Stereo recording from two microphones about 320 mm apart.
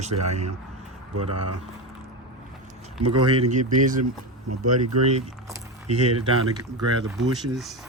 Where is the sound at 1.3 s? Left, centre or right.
Right.